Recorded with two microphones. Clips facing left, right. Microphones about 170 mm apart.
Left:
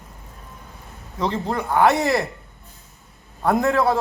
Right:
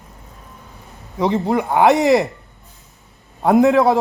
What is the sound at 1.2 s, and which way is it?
Speech, 15° right (ahead or behind).